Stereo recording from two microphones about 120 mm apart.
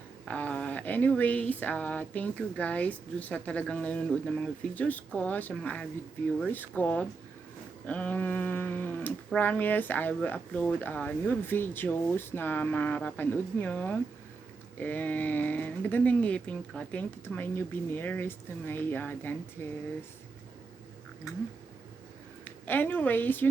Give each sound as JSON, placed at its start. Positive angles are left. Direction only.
{"t": 0.3, "sound": "speech", "side_deg": 10}
{"t": 21.3, "sound": "speech", "side_deg": 25}
{"t": 22.4, "sound": "a woman's voice", "side_deg": 15}